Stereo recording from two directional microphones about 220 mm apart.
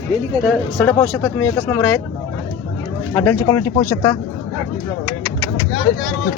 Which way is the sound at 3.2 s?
10° left (ahead or behind).